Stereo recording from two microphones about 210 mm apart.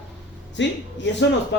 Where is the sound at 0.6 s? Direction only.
60° left (ahead or behind).